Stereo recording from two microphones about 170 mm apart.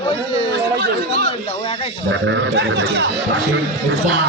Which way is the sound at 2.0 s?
90° right.